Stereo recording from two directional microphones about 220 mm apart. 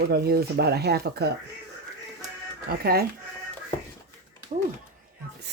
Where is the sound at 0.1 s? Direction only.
45° right (ahead or behind).